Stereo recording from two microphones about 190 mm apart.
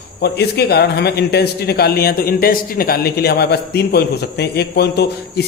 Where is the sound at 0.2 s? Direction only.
60° left (ahead or behind).